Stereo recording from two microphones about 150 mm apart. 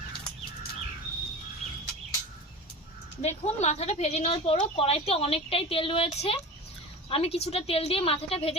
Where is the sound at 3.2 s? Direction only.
45° left (ahead or behind).